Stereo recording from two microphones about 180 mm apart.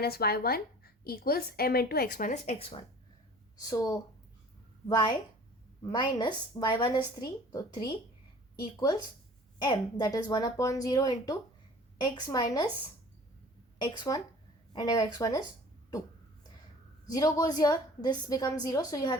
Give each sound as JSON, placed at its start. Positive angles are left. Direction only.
{"t": 0.0, "sound": "a woman's voice", "side_deg": 60}
{"t": 3.6, "sound": "speech", "side_deg": 20}
{"t": 9.6, "sound": "speech", "side_deg": 25}
{"t": 13.7, "sound": "speech", "side_deg": 25}
{"t": 17.1, "sound": "speech", "side_deg": 20}